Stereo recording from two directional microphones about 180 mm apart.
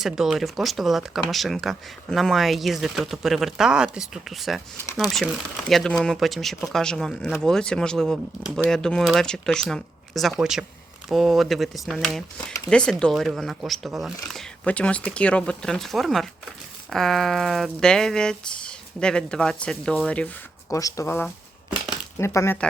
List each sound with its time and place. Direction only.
0.0 s speech: centre (ahead or behind); by 22.5 s 15° left (ahead or behind)